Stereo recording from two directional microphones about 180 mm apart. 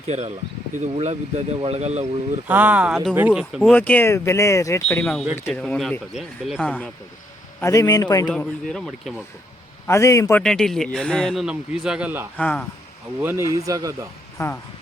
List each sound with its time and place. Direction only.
0.1 s speech: 40° right (ahead or behind)
2.5 s speech: 10° right (ahead or behind)
3.6 s speech: 10° left (ahead or behind)
4.9 s speech: 5° left (ahead or behind)
5.2 s speech: 10° right (ahead or behind)
5.5 s speech: 5° left (ahead or behind)
7.6 s a man's voice: 20° left (ahead or behind)
8.3 s speech: 5° left (ahead or behind)
9.8 s speech: 15° left (ahead or behind)
10.4 s speech: 5° left (ahead or behind)
12.4 s speech: 10° left (ahead or behind)
13.2 s speech: 15° right (ahead or behind)
14.3 s speech: 15° left (ahead or behind)